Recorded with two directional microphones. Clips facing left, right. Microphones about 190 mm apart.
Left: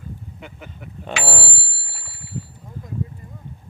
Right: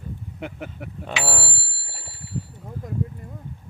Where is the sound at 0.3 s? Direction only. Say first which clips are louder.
Right 6 dB; 65° right (ahead or behind).